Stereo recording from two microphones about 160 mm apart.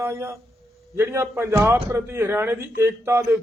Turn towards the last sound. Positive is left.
turn(degrees=-15)  # may be behind; listen again after turning